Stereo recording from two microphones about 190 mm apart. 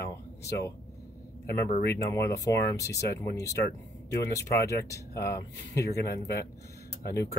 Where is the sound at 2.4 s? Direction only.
15° left (ahead or behind).